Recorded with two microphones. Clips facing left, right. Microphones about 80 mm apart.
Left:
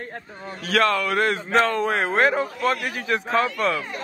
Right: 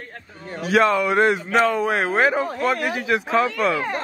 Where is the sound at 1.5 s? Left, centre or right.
Centre.